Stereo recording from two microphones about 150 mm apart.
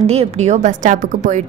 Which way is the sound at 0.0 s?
45° right (ahead or behind).